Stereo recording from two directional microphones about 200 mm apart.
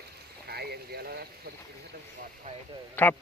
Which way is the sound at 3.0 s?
10° left (ahead or behind).